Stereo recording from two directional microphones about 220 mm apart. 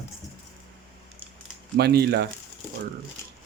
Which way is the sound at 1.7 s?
45° right (ahead or behind).